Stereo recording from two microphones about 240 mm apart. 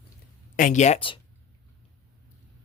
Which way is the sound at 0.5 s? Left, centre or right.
Left.